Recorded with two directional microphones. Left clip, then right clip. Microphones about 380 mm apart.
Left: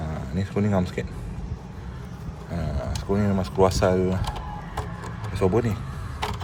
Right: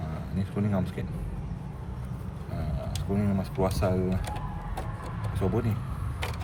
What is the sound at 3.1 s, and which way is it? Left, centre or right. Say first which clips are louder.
Speech: left 8 dB; centre.